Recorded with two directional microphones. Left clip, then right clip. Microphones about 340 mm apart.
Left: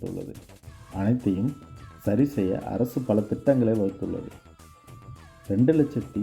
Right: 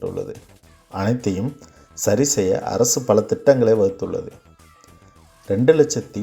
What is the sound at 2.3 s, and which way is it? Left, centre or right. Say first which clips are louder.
Speech: right 8 dB; centre.